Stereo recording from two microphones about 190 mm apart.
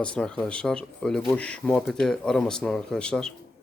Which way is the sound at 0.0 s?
5° left (ahead or behind).